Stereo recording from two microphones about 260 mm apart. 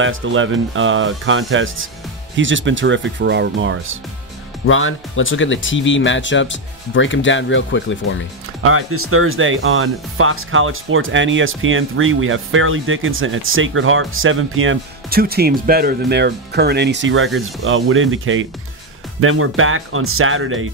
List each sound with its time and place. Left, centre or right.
0.0 s speech: right
4.6 s speech: left
8.6 s speech: right
15.0 s speech: right